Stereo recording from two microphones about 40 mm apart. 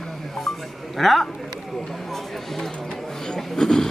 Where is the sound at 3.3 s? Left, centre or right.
Centre.